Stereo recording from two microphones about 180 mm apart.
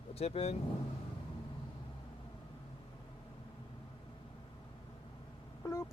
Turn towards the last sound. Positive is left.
turn(degrees=15)  # may be behind; listen again after turning